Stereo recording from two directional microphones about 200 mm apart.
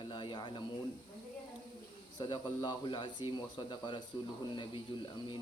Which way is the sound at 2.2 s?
20° left (ahead or behind).